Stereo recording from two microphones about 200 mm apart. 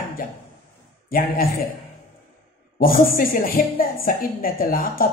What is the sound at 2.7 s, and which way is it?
A woman's voice, 45° left (ahead or behind).